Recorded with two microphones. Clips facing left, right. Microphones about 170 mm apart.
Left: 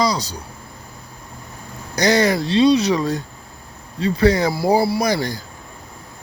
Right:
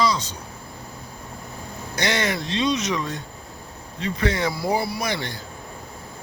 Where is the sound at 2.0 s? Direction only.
35° left (ahead or behind).